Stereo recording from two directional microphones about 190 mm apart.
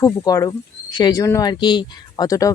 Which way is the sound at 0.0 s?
20° left (ahead or behind).